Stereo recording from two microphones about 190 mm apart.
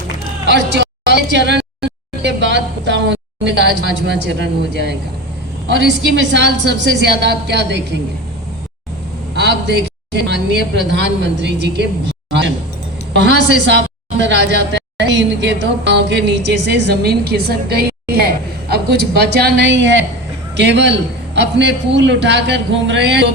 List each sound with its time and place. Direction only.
0.5 s a sound: 65° right (ahead or behind)
2.2 s a woman's voice: 65° right (ahead or behind)
9.3 s a man's voice: 60° right (ahead or behind)